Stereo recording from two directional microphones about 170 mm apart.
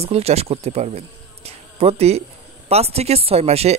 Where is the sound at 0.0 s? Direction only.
35° right (ahead or behind).